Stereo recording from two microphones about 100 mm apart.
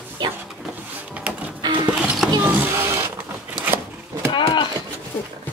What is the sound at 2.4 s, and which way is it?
Vehicle, 20° right (ahead or behind).